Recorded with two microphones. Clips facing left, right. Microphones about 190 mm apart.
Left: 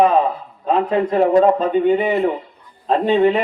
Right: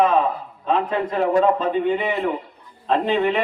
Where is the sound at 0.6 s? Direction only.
35° left (ahead or behind).